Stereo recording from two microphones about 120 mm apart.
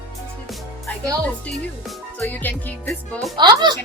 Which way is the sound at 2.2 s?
15° left (ahead or behind).